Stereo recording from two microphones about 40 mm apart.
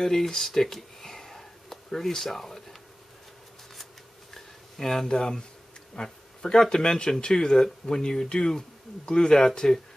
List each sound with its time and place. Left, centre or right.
0.0 s speech: centre
4.3 s a sound: centre
5.9 s speech: centre